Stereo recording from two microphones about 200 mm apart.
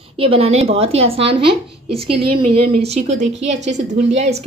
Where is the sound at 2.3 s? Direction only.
25° right (ahead or behind).